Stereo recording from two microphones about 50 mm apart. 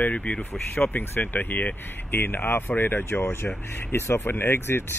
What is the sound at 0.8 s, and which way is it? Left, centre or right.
Speech, left.